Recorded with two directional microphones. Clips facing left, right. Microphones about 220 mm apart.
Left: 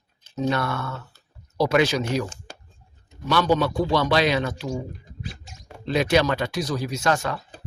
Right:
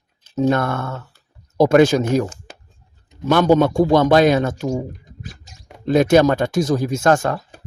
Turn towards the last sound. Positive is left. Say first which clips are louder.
# right 7 dB
turn(degrees=-45)  # may be behind; listen again after turning